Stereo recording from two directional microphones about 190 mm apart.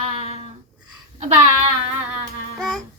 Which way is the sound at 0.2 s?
30° right (ahead or behind).